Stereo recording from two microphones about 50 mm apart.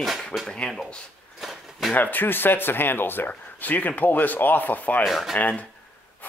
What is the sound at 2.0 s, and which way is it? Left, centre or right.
Speech, left.